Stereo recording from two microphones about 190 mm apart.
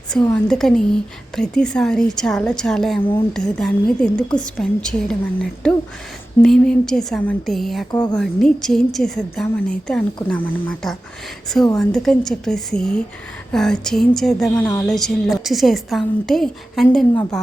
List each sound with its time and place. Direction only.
0.3 s a woman's voice: 5° left (ahead or behind)
7.9 s a woman's voice: 20° left (ahead or behind)
8.1 s a woman's voice: 5° left (ahead or behind)